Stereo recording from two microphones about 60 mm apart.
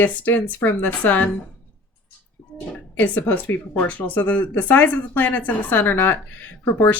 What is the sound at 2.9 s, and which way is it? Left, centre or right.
Speech, left.